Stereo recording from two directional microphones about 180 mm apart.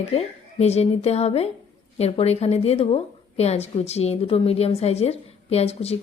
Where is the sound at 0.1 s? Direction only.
35° left (ahead or behind).